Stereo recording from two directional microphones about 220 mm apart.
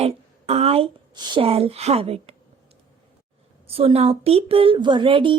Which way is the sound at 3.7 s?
25° right (ahead or behind).